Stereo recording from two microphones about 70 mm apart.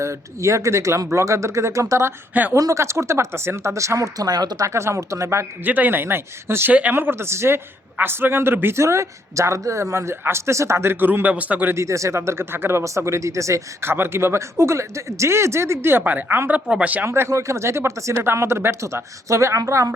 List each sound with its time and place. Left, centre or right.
0.0 s speech: right
4.6 s speech: right
5.6 s speech: right
11.0 s a man's voice: right
11.7 s speech: right
13.9 s speech: right
16.6 s speech: centre
17.1 s speech: right